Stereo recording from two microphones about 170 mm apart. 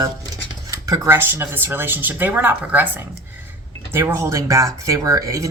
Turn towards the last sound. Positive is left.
turn(degrees=-20)  # may be behind; listen again after turning